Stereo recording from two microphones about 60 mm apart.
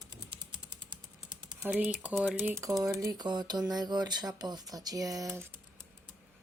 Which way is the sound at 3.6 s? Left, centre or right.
Right.